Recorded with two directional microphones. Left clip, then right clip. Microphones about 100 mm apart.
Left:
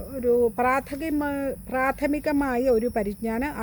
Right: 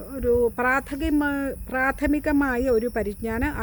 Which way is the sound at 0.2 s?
30° right (ahead or behind).